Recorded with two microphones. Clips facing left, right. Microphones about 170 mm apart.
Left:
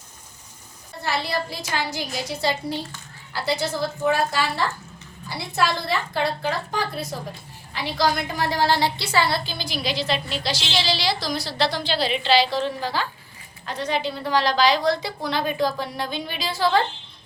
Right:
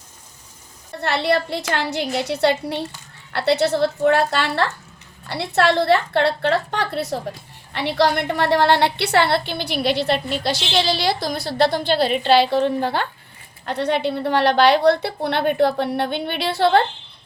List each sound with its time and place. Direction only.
1.0 s a woman's voice: 70° right (ahead or behind)